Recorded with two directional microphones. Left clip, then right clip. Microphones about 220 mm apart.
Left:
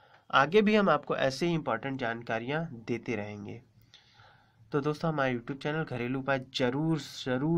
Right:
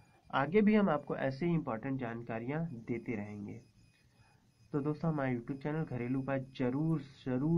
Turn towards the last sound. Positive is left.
turn(degrees=25)  # may be behind; listen again after turning